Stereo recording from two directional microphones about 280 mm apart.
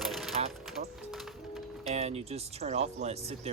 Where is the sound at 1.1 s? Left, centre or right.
Centre.